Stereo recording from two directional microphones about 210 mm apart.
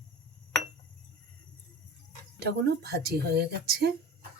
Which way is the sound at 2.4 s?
50° right (ahead or behind).